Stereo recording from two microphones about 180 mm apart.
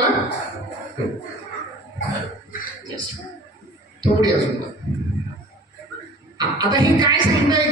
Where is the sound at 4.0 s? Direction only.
20° right (ahead or behind).